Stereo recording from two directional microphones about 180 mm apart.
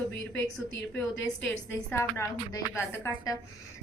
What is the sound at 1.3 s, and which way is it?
A woman's voice, 10° left (ahead or behind).